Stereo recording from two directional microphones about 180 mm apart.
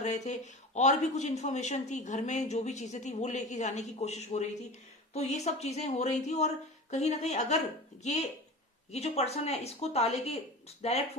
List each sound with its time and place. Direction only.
0.0 s speech: 40° left (ahead or behind)